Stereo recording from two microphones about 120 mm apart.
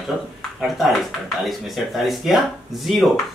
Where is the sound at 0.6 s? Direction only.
Centre (ahead or behind).